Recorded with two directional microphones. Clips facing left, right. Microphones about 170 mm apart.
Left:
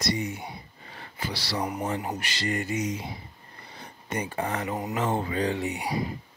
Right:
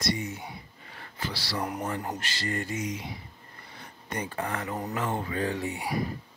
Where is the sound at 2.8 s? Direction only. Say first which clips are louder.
Left 3 dB; 30° left (ahead or behind).